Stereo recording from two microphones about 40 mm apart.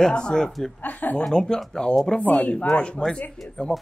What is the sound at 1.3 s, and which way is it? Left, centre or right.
Speech, centre.